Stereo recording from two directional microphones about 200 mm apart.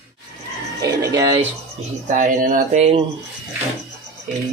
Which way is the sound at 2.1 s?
40° right (ahead or behind).